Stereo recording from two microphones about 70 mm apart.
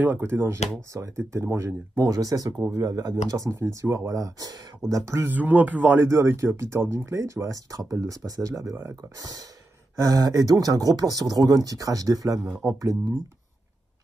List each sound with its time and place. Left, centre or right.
0.0 s speech: right
5.2 s speech: right
6.0 s speech: right
9.9 s speech: right
12.6 s speech: centre